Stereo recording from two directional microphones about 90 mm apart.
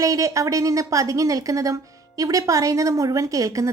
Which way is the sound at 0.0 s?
40° right (ahead or behind).